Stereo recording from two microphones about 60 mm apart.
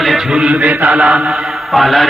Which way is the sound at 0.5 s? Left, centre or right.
Right.